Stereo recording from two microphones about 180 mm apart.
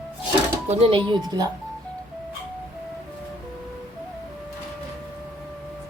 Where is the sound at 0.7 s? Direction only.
30° right (ahead or behind).